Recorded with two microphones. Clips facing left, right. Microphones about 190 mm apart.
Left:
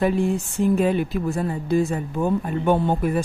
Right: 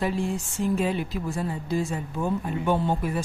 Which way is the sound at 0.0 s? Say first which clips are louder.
Left 6 dB; 55° left (ahead or behind).